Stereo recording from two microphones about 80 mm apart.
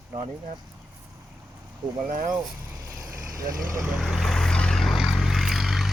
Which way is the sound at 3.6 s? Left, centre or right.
Right.